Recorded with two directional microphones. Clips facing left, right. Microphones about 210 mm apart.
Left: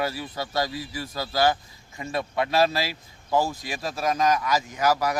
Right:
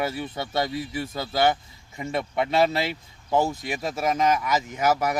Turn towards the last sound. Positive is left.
turn(degrees=-20)  # may be behind; listen again after turning